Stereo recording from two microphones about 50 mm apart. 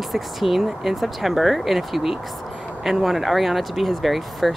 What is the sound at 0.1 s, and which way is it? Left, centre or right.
Speech, centre.